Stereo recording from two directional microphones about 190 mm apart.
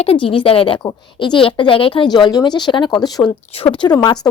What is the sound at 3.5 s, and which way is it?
Speech, 30° left (ahead or behind).